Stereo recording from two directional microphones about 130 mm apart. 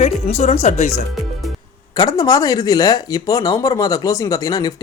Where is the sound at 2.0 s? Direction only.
30° left (ahead or behind).